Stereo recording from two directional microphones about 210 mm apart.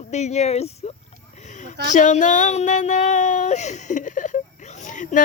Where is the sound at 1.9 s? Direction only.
35° left (ahead or behind).